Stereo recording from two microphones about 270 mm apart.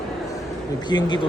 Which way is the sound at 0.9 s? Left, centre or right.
Centre.